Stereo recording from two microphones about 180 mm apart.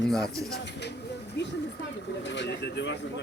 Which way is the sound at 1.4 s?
75° left (ahead or behind).